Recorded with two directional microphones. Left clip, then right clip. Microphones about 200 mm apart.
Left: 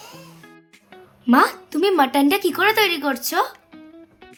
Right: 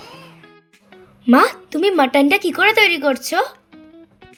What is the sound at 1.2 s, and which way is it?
A woman's voice, 20° right (ahead or behind).